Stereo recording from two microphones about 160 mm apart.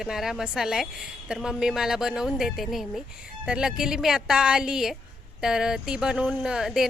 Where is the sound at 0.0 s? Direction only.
Centre (ahead or behind).